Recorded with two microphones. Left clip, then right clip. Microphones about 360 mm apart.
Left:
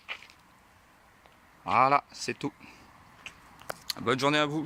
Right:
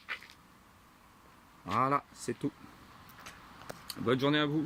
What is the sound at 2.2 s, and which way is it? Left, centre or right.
Speech, left.